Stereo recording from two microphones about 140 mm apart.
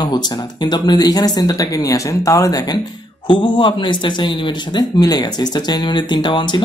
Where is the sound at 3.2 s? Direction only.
35° left (ahead or behind).